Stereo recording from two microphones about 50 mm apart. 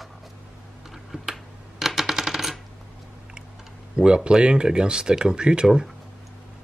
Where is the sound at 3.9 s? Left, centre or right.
Centre.